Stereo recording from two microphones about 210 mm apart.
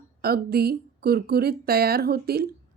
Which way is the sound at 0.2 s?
45° right (ahead or behind).